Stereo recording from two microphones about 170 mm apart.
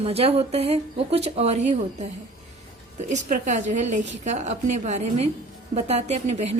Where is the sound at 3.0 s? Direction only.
45° right (ahead or behind).